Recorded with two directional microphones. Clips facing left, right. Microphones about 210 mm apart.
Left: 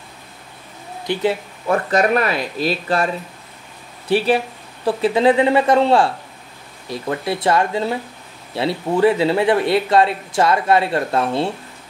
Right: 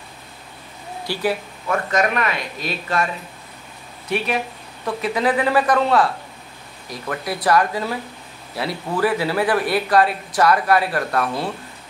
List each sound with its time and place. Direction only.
1.0 s speech: 20° left (ahead or behind)
1.7 s speech: 35° left (ahead or behind)
4.1 s speech: 30° left (ahead or behind)